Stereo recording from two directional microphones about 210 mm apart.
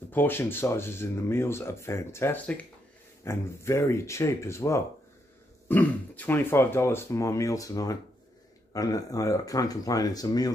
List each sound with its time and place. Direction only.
0.1 s speech: 10° left (ahead or behind)